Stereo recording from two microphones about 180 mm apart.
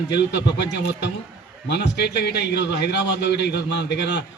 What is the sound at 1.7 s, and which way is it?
A man's voice, 70° left (ahead or behind).